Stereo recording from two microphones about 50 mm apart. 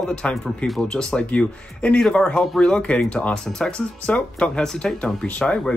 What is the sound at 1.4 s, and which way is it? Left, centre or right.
Speech, left.